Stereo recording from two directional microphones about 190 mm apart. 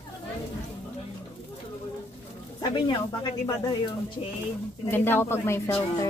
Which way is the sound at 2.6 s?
25° left (ahead or behind).